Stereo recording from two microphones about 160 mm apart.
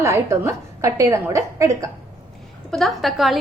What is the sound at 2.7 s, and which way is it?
Speech, centre (ahead or behind).